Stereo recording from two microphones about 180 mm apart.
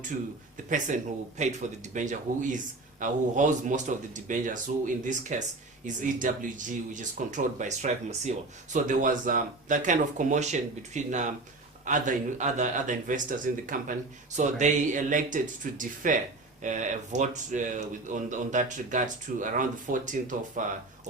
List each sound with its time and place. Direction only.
0.5 s a man's voice: 45° right (ahead or behind)